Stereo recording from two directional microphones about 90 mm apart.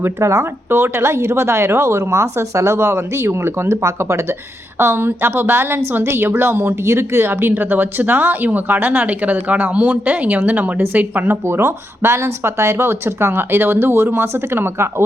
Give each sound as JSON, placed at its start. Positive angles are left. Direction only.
{"t": 0.0, "sound": "a woman's voice", "side_deg": -30}